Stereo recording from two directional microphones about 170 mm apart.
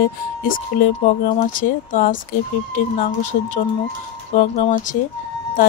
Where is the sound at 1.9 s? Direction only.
50° left (ahead or behind).